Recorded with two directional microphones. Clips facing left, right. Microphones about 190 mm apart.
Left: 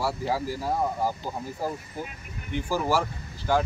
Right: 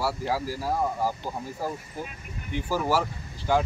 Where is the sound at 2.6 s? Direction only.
10° left (ahead or behind).